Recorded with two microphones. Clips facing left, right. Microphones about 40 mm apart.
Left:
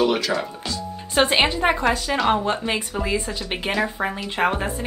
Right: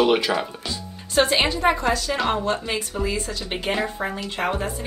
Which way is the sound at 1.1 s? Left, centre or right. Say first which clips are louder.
Left 1 dB; left.